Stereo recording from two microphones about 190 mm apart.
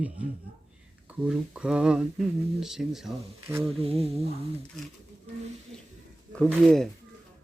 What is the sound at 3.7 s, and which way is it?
Speech, 30° right (ahead or behind).